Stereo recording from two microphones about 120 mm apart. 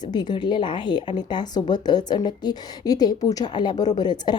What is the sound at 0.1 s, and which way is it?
A woman's voice, 35° left (ahead or behind).